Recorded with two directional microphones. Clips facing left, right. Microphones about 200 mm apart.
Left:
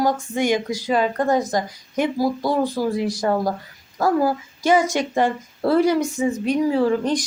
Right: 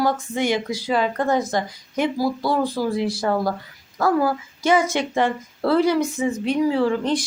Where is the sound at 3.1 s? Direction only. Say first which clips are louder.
Left 1 dB; 40° left (ahead or behind).